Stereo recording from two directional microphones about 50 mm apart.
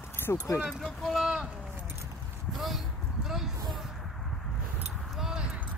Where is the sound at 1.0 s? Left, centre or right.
Centre.